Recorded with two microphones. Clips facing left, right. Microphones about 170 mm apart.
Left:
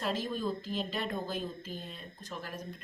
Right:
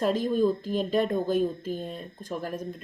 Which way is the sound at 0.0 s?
45° right (ahead or behind).